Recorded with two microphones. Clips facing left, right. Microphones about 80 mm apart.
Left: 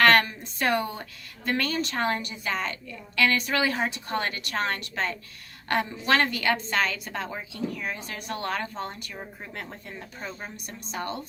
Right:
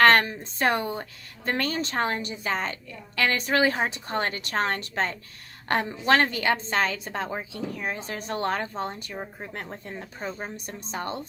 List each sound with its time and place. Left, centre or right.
0.0 s a woman's voice: right